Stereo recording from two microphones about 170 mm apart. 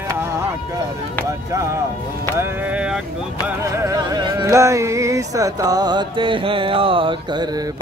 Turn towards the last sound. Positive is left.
turn(degrees=-25)  # may be behind; listen again after turning